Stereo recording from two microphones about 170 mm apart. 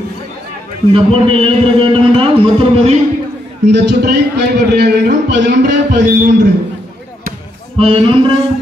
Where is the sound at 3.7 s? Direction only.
85° right.